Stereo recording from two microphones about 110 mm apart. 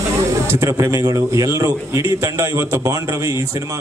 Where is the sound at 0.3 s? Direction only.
25° right (ahead or behind).